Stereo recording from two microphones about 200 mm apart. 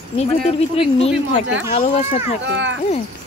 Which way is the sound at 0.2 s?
30° left (ahead or behind).